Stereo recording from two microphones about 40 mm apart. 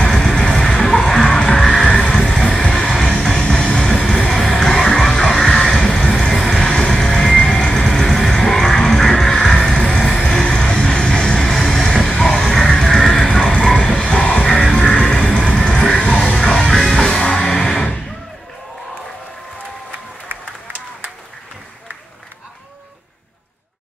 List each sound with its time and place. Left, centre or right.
0.0 s music: centre
3.2 s a sound: centre
3.9 s music: centre